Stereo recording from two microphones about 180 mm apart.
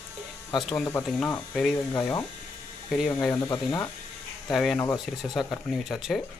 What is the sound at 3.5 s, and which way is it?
Speech, 25° left (ahead or behind).